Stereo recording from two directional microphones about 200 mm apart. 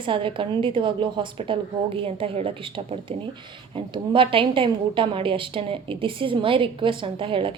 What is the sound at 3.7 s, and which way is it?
A woman's voice, 25° right (ahead or behind).